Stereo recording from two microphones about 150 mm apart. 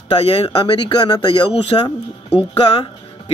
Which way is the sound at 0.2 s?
40° left (ahead or behind).